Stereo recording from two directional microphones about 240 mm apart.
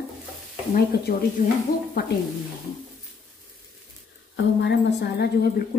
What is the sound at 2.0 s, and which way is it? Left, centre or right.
Speech, left.